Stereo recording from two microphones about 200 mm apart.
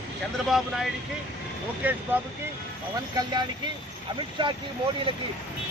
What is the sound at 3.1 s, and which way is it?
Speech, 20° right (ahead or behind).